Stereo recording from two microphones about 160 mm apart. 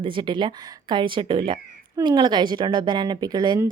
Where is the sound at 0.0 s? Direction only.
30° right (ahead or behind).